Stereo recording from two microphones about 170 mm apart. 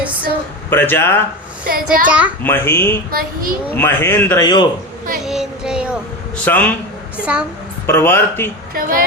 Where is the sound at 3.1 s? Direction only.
60° right (ahead or behind).